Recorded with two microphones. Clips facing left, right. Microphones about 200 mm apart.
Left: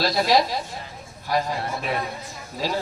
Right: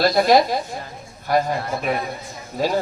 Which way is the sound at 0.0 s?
50° right (ahead or behind).